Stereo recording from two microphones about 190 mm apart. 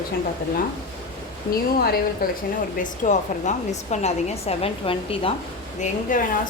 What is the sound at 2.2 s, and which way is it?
A woman's voice, 50° left (ahead or behind).